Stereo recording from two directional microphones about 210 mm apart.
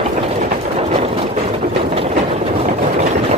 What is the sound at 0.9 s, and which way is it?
Vehicle, 30° right (ahead or behind).